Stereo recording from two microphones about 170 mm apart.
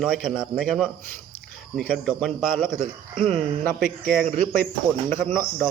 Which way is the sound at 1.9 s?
5° right (ahead or behind).